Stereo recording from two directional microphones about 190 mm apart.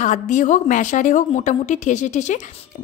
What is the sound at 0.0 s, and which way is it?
Speech, 40° left (ahead or behind).